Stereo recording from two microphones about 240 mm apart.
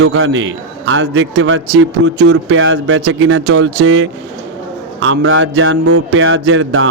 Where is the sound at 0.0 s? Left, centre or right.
Right.